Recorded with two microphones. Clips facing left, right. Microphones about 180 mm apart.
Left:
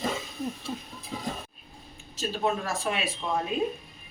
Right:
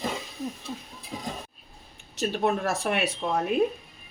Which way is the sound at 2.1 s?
65° right (ahead or behind).